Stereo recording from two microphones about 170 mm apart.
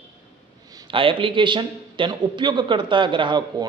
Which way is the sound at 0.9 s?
30° right (ahead or behind).